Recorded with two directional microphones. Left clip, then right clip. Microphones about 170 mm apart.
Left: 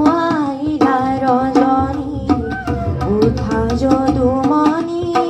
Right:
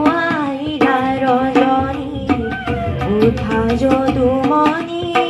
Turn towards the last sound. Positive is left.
turn(degrees=-40)  # may be behind; listen again after turning